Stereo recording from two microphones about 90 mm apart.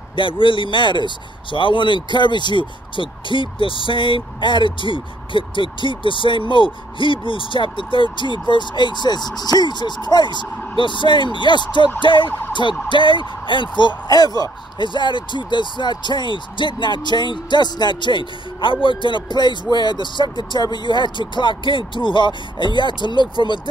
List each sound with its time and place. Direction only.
0.1 s speech: 70° left (ahead or behind)